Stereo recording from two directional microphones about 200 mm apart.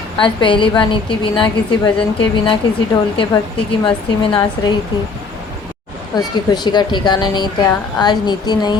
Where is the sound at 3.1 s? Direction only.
25° left (ahead or behind).